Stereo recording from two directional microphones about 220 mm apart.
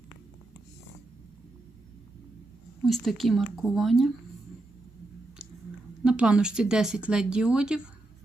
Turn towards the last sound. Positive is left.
turn(degrees=-5)  # may be behind; listen again after turning